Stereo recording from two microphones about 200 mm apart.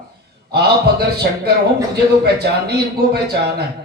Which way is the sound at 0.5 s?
55° right (ahead or behind).